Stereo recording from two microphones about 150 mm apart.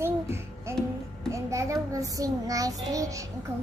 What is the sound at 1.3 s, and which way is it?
A child's voice, 20° right (ahead or behind).